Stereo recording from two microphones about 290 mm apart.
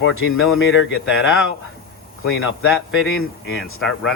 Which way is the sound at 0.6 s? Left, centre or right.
Left.